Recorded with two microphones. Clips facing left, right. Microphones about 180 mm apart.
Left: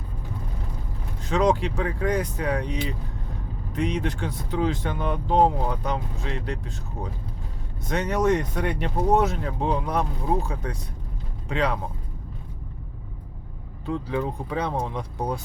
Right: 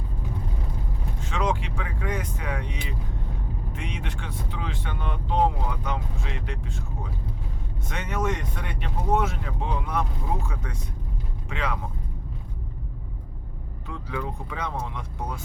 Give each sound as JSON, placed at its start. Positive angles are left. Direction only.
{"t": 1.2, "sound": "speech", "side_deg": 40}
{"t": 13.8, "sound": "speech", "side_deg": 35}